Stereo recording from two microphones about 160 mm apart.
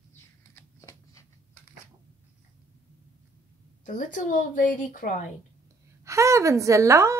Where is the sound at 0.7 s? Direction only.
20° left (ahead or behind).